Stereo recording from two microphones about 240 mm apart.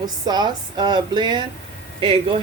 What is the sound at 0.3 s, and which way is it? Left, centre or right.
Speech, centre.